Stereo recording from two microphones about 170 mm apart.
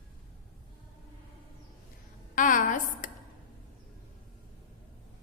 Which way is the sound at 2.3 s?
50° left (ahead or behind).